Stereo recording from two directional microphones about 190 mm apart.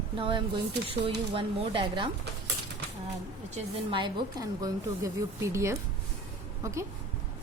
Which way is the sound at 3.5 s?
25° right (ahead or behind).